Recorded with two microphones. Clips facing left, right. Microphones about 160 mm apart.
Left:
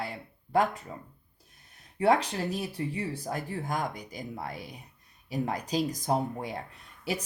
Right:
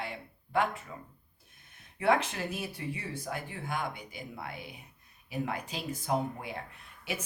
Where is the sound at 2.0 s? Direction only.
35° left (ahead or behind).